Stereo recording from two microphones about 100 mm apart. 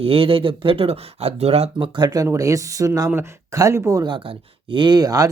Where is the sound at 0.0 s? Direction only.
70° right (ahead or behind); by 1.7 s 90° right.